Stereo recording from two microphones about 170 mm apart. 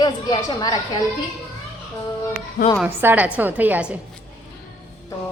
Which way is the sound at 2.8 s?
10° right (ahead or behind).